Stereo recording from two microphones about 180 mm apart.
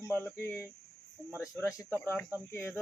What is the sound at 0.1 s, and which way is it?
Speech, 10° left (ahead or behind).